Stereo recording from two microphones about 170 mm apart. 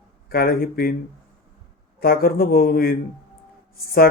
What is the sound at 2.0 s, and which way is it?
A man's voice, 60° left (ahead or behind).